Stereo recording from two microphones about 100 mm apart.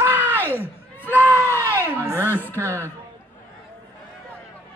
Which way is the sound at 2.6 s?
25° right (ahead or behind).